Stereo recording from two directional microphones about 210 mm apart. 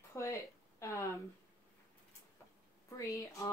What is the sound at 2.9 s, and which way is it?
Speech, 15° left (ahead or behind).